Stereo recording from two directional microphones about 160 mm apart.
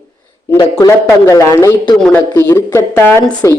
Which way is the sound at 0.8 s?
20° left (ahead or behind).